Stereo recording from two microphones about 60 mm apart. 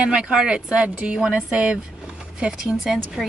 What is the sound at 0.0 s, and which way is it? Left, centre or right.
Speech, centre.